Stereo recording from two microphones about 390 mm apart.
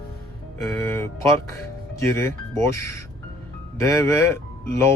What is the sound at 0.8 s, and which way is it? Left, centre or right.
Speech, centre.